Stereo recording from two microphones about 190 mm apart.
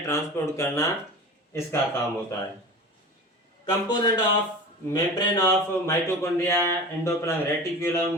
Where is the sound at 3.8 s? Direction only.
20° left (ahead or behind).